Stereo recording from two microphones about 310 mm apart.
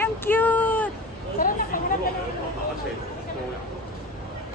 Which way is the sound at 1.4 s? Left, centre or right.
Left.